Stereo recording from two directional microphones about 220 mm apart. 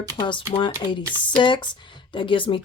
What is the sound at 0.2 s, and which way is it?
Speech, 20° left (ahead or behind).